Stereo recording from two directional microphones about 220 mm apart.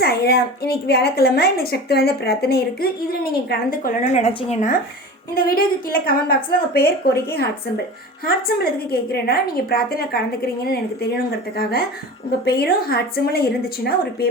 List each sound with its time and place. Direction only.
0.0 s a woman's voice: 45° left (ahead or behind)
8.2 s a woman's voice: 40° left (ahead or behind)